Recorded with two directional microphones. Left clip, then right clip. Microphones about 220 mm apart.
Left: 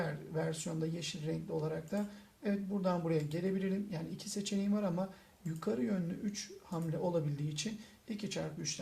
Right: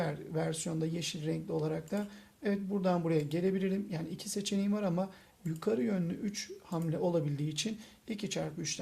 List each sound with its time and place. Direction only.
0.3 s speech: 45° right (ahead or behind)